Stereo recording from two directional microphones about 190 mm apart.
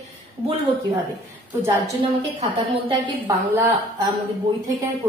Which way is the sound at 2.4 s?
30° right (ahead or behind).